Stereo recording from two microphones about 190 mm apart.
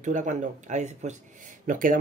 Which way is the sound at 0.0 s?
40° right (ahead or behind).